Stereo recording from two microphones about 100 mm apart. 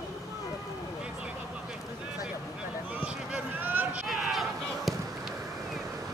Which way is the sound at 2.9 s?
10° right (ahead or behind).